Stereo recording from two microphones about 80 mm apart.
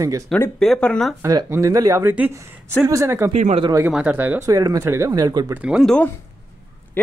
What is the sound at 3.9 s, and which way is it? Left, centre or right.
Speech, centre.